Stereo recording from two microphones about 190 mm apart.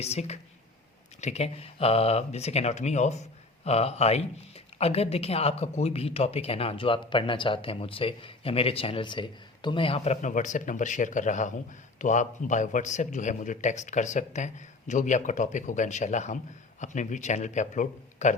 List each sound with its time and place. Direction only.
0.0 s speech: 35° left (ahead or behind)